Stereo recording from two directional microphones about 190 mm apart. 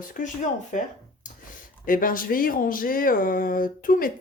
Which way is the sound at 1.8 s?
45° left (ahead or behind).